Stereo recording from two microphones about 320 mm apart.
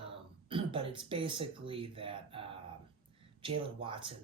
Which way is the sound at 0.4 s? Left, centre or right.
Centre.